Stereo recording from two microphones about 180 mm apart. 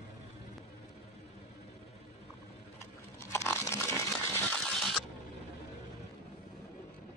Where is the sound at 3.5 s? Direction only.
15° left (ahead or behind).